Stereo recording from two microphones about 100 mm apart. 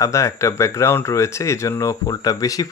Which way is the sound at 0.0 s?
30° left (ahead or behind).